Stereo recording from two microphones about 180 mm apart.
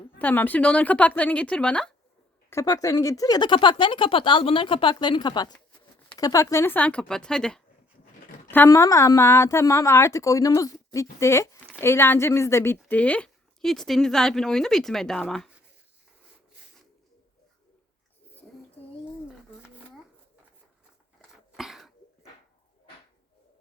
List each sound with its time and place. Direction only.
0.2 s a woman's voice: 10° left (ahead or behind)
2.5 s a woman's voice: 20° left (ahead or behind)
21.5 s cough: centre (ahead or behind)